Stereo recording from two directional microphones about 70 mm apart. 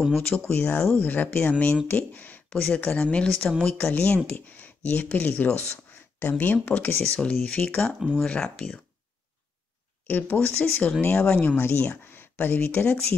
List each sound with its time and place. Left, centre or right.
0.1 s speech: centre
10.0 s speech: left
11.0 s speech: left